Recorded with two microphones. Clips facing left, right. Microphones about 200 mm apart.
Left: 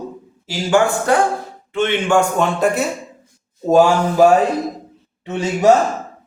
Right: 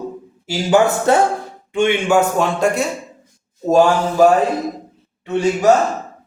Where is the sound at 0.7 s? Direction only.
25° right (ahead or behind).